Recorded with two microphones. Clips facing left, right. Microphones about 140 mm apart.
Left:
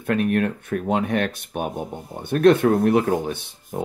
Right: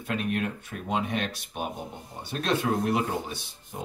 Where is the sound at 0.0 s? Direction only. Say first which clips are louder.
Left 8 dB; 55° left (ahead or behind).